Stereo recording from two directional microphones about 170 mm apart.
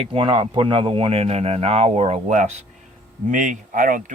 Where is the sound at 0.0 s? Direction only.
30° right (ahead or behind).